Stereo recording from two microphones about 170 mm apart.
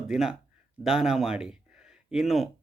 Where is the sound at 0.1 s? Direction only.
5° right (ahead or behind).